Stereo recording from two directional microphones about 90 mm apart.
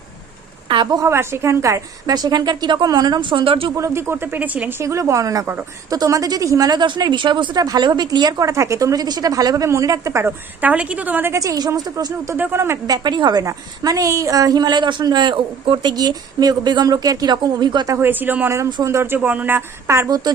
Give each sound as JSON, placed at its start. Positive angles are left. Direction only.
{"t": 0.7, "sound": "speech", "side_deg": -60}
{"t": 0.9, "sound": "speech", "side_deg": -30}
{"t": 3.8, "sound": "a woman's voice", "side_deg": -30}
{"t": 4.8, "sound": "a woman's voice", "side_deg": -35}
{"t": 10.6, "sound": "a woman's voice", "side_deg": -15}
{"t": 11.3, "sound": "a woman's voice", "side_deg": -35}
{"t": 12.4, "sound": "a woman's voice", "side_deg": -25}
{"t": 12.9, "sound": "speech", "side_deg": -55}
{"t": 13.4, "sound": "speech", "side_deg": -40}
{"t": 18.0, "sound": "a woman's voice", "side_deg": -20}
{"t": 20.1, "sound": "speech", "side_deg": -45}